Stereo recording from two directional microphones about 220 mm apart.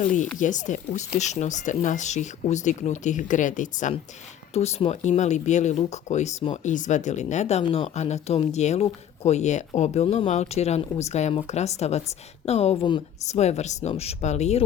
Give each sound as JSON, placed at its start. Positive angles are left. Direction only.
{"t": 0.3, "sound": "speech", "side_deg": 35}